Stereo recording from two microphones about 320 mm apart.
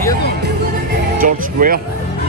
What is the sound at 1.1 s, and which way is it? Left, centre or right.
Music, right.